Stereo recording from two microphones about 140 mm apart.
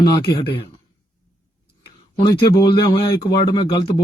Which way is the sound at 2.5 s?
30° left (ahead or behind).